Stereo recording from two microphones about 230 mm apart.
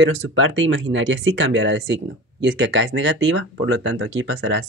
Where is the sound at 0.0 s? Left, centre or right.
Right.